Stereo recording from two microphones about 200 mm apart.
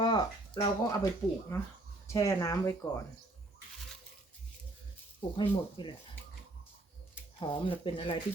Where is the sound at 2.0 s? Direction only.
15° left (ahead or behind).